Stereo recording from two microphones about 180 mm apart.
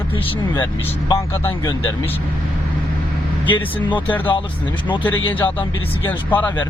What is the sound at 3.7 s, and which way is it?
Speech, 10° left (ahead or behind).